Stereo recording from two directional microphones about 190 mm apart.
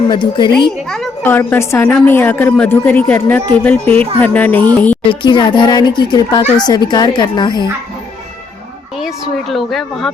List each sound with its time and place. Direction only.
0.1 s speech: 25° left (ahead or behind)
0.9 s a woman's voice: centre (ahead or behind)
5.0 s speech: 25° left (ahead or behind)
9.0 s a woman's voice: centre (ahead or behind)